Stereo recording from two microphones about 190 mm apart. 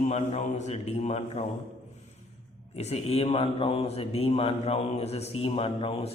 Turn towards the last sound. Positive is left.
turn(degrees=30)  # may be behind; listen again after turning